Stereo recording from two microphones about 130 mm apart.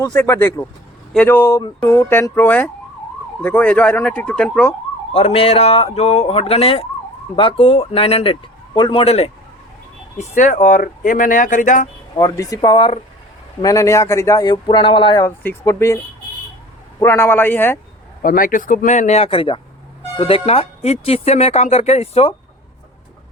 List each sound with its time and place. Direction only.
0.0 s speech: 15° left (ahead or behind)
5.1 s speech: 50° left (ahead or behind)
10.2 s speech: 80° left
12.1 s speech: 30° left (ahead or behind)
15.4 s speech: 25° left (ahead or behind)
17.0 s speech: 20° left (ahead or behind)
18.2 s speech: 90° left; by 22.4 s 50° left (ahead or behind)